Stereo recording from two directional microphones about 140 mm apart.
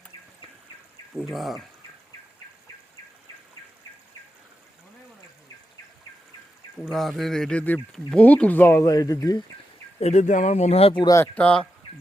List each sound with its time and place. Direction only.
1.2 s speech: centre (ahead or behind)
6.8 s speech: centre (ahead or behind); by 9.4 s 25° left (ahead or behind)
10.0 s speech: 55° left (ahead or behind)
11.0 s speech: 25° left (ahead or behind)
11.3 s speech: 10° left (ahead or behind)